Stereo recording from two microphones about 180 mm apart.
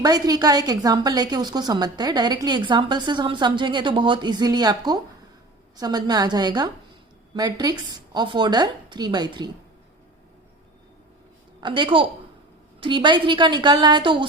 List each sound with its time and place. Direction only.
0.0 s a woman's voice: 20° right (ahead or behind)
11.6 s a woman's voice: 25° right (ahead or behind)